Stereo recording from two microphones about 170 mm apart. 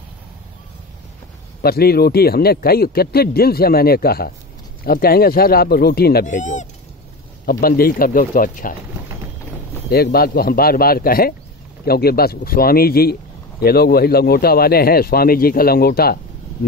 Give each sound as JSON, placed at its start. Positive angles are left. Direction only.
{"t": 1.6, "sound": "speech", "side_deg": 65}
{"t": 6.2, "sound": "speech", "side_deg": 45}
{"t": 7.4, "sound": "speech", "side_deg": 60}
{"t": 10.1, "sound": "speech", "side_deg": 60}